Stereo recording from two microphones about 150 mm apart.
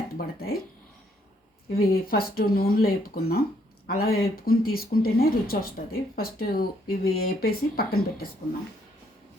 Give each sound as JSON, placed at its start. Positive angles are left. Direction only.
{"t": 0.2, "sound": "speech", "side_deg": 90}
{"t": 1.8, "sound": "speech", "side_deg": 85}